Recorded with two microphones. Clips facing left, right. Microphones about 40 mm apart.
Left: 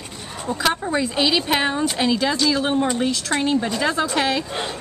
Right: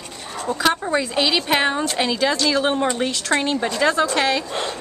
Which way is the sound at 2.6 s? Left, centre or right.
Right.